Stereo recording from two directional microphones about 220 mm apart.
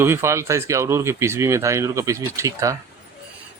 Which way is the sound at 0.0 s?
10° right (ahead or behind).